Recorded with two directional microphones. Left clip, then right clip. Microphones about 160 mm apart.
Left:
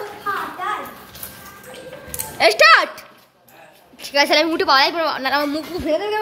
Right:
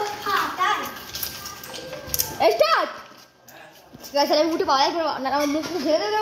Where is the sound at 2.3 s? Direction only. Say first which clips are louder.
Left 7 dB; 10° left (ahead or behind).